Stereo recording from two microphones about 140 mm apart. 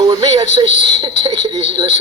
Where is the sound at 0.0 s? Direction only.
25° right (ahead or behind).